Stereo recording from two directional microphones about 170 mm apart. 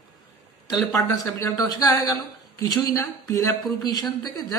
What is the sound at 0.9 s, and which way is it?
A woman's voice, 20° left (ahead or behind).